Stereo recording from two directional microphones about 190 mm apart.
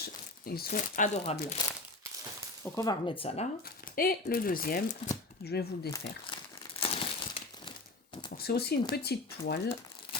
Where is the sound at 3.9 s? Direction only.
50° left (ahead or behind).